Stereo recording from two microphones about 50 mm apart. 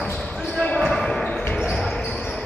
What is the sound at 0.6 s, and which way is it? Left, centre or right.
Basketball bounce, left.